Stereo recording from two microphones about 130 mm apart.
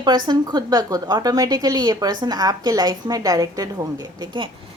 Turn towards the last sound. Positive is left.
turn(degrees=-35)  # may be behind; listen again after turning